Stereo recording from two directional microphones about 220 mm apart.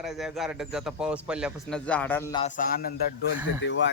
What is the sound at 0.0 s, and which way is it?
Speech, centre (ahead or behind).